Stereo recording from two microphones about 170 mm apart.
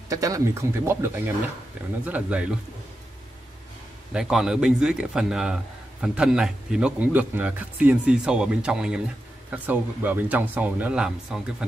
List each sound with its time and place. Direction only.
0.1 s speech: 20° right (ahead or behind)
4.1 s a man's voice: 5° right (ahead or behind)